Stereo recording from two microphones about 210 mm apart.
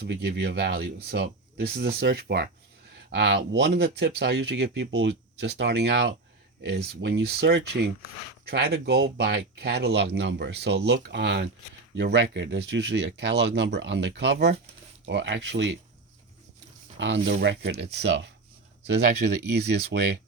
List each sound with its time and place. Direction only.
0.0 s speech: 55° right (ahead or behind)
17.0 s speech: 55° right (ahead or behind)